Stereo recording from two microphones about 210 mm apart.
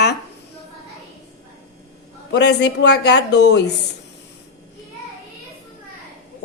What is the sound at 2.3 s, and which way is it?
A woman's voice, 55° left (ahead or behind).